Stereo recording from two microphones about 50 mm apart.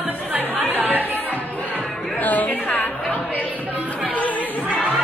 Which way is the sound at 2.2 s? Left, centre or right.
Left.